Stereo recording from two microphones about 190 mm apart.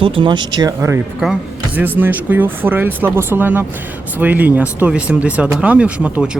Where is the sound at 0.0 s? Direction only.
25° right (ahead or behind).